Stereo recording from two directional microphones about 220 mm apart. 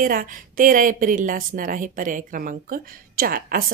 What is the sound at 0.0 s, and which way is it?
Speech, 40° right (ahead or behind).